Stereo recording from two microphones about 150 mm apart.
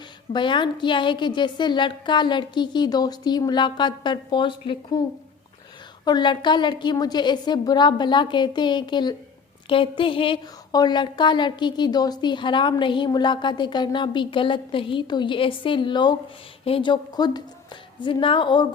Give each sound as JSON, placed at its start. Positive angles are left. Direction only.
{"t": 0.3, "sound": "speech", "side_deg": 30}
{"t": 6.1, "sound": "a woman's voice", "side_deg": 30}